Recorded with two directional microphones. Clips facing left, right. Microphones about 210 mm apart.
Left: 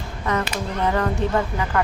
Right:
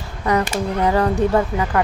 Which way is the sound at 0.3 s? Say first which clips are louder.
Right 5 dB; 35° right (ahead or behind).